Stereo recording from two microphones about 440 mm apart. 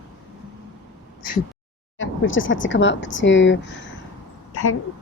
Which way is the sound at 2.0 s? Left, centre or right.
Left.